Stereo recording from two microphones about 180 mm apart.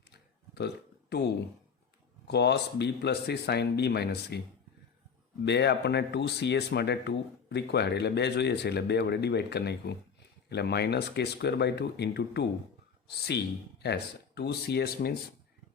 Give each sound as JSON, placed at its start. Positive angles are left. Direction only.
{"t": 0.1, "sound": "burping", "side_deg": 65}
{"t": 2.2, "sound": "speech", "side_deg": 70}
{"t": 5.5, "sound": "speech", "side_deg": 70}